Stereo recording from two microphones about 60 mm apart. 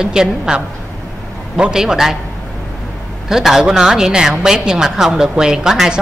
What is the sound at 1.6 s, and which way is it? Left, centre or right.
Speech, centre.